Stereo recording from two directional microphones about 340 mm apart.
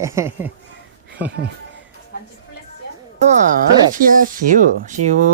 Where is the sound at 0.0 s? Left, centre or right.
Centre.